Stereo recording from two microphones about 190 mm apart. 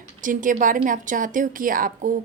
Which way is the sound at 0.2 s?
45° right (ahead or behind).